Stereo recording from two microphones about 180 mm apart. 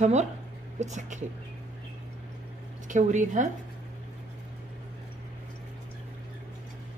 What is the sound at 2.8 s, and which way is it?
Speech, 45° right (ahead or behind).